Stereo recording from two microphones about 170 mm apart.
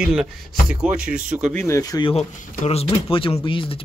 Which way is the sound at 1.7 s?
20° left (ahead or behind).